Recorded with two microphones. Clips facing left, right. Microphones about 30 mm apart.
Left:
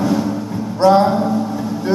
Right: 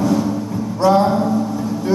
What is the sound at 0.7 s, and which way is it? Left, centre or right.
Speech, left.